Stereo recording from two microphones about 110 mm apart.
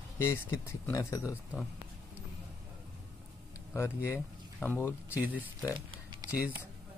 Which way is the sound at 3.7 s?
25° left (ahead or behind).